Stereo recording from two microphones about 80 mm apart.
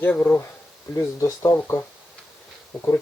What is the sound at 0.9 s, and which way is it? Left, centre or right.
Speech, left.